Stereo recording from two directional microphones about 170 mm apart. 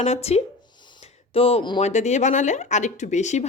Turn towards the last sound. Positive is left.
turn(degrees=45)  # may be behind; listen again after turning